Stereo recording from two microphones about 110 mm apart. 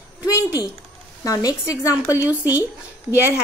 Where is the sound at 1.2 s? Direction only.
30° left (ahead or behind).